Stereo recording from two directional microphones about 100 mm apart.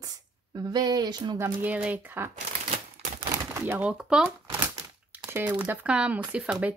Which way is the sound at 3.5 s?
25° right (ahead or behind).